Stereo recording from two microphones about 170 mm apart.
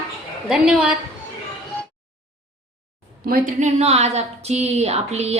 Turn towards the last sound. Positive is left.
turn(degrees=-40)  # may be behind; listen again after turning